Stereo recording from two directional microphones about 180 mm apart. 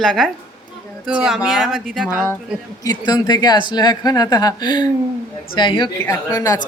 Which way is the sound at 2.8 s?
20° left (ahead or behind).